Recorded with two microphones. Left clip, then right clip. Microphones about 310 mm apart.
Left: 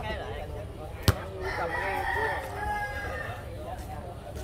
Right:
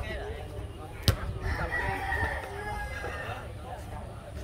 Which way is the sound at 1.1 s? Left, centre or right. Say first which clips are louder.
Left 2 dB; centre.